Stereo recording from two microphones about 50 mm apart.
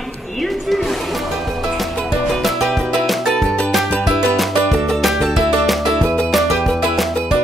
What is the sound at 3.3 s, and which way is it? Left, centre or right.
Music, centre.